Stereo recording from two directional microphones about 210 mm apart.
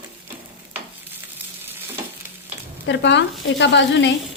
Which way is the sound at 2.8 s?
55° left (ahead or behind).